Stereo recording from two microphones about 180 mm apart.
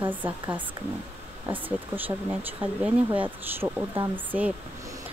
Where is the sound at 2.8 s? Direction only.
10° right (ahead or behind).